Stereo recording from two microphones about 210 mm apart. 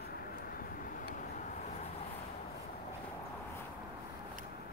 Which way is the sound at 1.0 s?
40° left (ahead or behind).